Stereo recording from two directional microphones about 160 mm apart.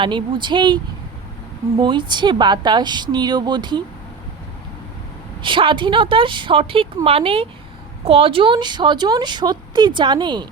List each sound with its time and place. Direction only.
0.0 s speech: 30° right (ahead or behind)
1.8 s speech: 30° right (ahead or behind)
5.4 s a woman's voice: 30° right (ahead or behind)